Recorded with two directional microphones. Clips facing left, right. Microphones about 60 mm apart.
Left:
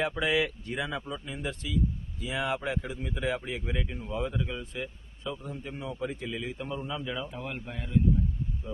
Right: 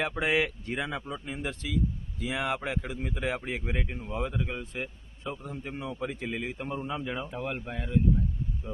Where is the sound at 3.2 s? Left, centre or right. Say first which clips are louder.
Left 1 dB; right.